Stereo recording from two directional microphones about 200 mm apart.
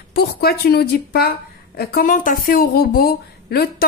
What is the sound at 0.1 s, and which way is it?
A woman's voice, 50° left (ahead or behind).